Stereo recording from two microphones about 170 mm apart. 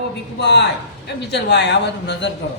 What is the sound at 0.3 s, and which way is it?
A man's voice, 90° left.